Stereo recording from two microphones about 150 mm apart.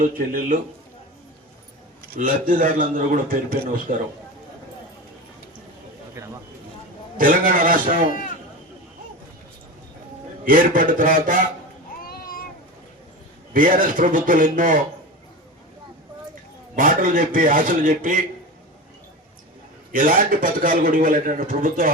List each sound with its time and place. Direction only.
0.0 s a man's voice: 65° right (ahead or behind)
2.0 s a man's voice: 65° right (ahead or behind)
7.2 s a man's voice: 70° right (ahead or behind)
10.4 s a man's voice: 70° right (ahead or behind)
12.0 s a sound: 75° left (ahead or behind)
13.5 s a man's voice: 65° right (ahead or behind)
16.7 s a man's voice: 65° right (ahead or behind)
19.9 s a man's voice: 65° right (ahead or behind)